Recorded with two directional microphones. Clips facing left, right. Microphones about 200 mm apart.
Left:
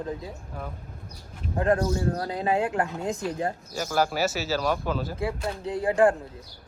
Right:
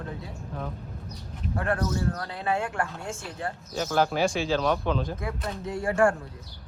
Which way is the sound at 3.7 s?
5° left (ahead or behind).